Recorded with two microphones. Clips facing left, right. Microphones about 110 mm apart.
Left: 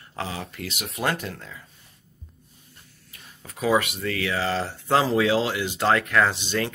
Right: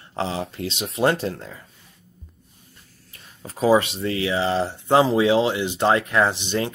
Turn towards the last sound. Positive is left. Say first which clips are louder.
# right 2 dB
turn(degrees=-20)  # may be behind; listen again after turning